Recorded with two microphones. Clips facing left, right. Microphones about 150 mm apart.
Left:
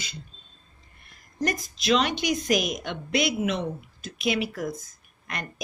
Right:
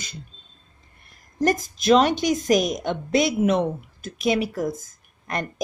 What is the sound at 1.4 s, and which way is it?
A woman's voice, 45° right (ahead or behind).